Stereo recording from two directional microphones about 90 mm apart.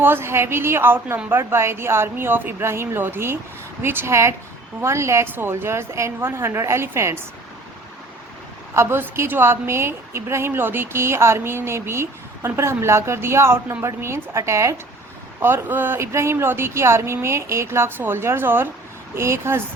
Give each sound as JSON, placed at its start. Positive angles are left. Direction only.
{"t": 0.0, "sound": "a woman's voice", "side_deg": -25}
{"t": 8.7, "sound": "a woman's voice", "side_deg": -30}